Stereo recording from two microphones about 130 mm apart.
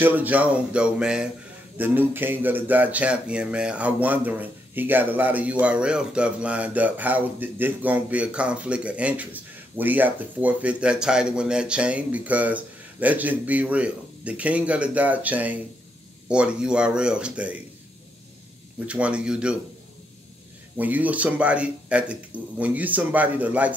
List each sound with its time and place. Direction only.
0.0 s speech: 15° right (ahead or behind)
18.9 s speech: 10° right (ahead or behind)
20.7 s speech: 10° right (ahead or behind)